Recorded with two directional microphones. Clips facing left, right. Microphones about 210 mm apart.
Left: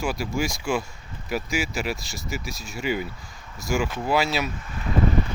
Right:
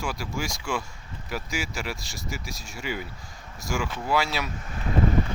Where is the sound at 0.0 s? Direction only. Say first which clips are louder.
Left 5 dB; 10° left (ahead or behind).